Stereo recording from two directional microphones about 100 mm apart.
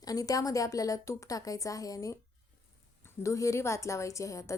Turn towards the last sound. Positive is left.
turn(degrees=30)  # may be behind; listen again after turning